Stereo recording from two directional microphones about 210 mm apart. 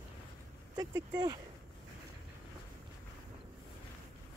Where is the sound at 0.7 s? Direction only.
20° right (ahead or behind).